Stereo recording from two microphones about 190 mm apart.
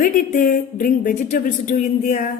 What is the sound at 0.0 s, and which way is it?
A woman's voice, 45° left (ahead or behind).